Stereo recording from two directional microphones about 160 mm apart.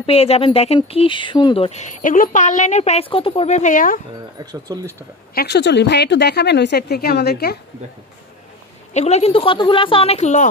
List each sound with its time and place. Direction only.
0.0 s speech: 40° left (ahead or behind); by 4.0 s 55° left (ahead or behind)
4.4 s speech: 25° right (ahead or behind)
5.3 s speech: 80° left
8.9 s speech: 40° left (ahead or behind)